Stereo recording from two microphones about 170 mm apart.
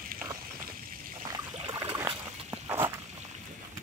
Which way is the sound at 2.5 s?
15° right (ahead or behind).